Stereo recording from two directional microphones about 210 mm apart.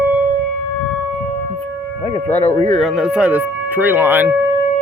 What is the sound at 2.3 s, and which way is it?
Speech, 30° left (ahead or behind).